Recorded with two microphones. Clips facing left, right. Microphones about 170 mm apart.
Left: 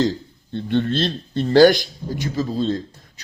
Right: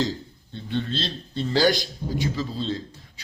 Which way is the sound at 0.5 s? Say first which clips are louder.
Left 8 dB; 60° left (ahead or behind).